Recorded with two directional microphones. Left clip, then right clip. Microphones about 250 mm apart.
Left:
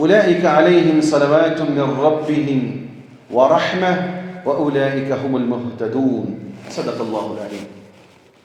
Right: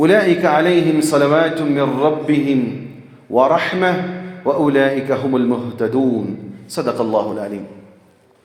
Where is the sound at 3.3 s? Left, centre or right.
Right.